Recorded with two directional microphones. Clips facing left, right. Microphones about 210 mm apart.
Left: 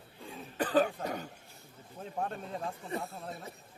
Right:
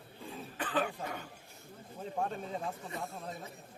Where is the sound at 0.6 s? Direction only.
40° left (ahead or behind).